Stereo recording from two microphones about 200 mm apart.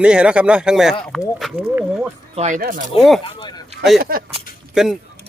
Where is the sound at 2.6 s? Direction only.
45° right (ahead or behind).